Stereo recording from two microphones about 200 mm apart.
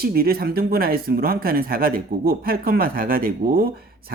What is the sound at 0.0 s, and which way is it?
Speech, 50° right (ahead or behind).